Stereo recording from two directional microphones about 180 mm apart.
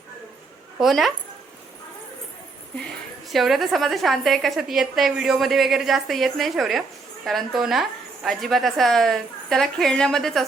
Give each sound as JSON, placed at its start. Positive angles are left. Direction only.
{"t": 0.8, "sound": "a woman's voice", "side_deg": 0}
{"t": 3.2, "sound": "a woman's voice", "side_deg": 0}